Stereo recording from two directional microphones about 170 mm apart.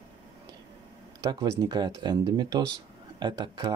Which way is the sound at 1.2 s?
25° right (ahead or behind).